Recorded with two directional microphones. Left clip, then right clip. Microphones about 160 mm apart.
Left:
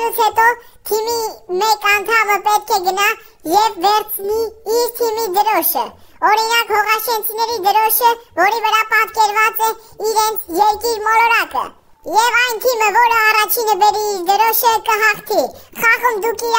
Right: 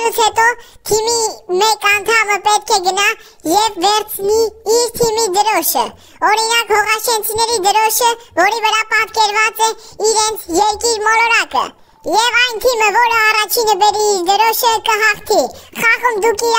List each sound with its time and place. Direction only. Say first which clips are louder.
0.0 s a child's voice: right 1 dB; 35° right (ahead or behind)